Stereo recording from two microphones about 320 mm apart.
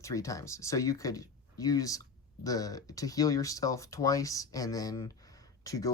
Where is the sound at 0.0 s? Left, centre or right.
Centre.